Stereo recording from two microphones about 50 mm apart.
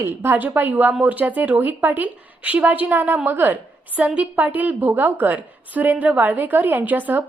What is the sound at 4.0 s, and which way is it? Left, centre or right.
A woman's voice, right.